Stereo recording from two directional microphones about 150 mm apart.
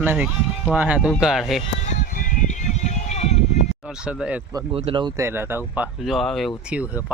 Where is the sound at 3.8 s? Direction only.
5° right (ahead or behind).